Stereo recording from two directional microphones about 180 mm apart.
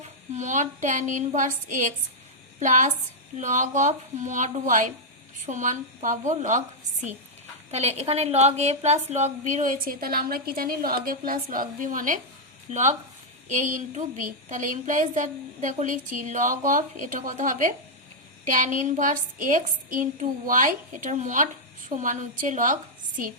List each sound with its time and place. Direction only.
0.3 s a woman's voice: 40° right (ahead or behind)
7.7 s a woman's voice: 35° right (ahead or behind)